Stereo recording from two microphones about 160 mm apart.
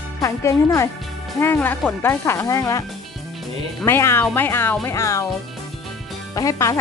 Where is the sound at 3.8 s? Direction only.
15° left (ahead or behind).